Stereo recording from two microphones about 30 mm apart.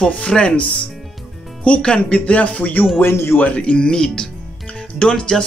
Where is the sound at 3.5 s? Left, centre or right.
Left.